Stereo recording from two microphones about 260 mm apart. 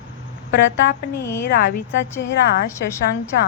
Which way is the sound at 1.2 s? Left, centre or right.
Centre.